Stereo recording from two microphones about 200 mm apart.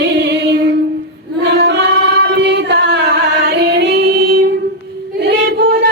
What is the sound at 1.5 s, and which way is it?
Singing, 60° right (ahead or behind).